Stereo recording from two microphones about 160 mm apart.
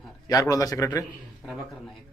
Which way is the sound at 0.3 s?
20° left (ahead or behind).